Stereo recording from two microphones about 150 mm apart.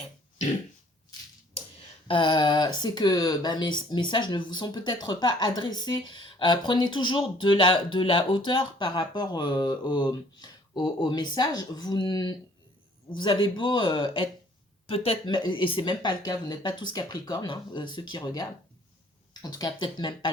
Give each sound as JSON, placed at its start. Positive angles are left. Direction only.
{"t": 2.0, "sound": "speech", "side_deg": 35}